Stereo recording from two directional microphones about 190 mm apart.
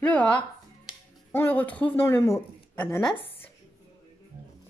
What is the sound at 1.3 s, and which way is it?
Speech, 10° left (ahead or behind).